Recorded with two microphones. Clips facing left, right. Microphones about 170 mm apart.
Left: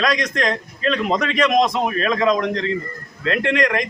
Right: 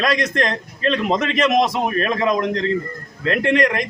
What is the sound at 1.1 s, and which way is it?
Speech, 5° right (ahead or behind).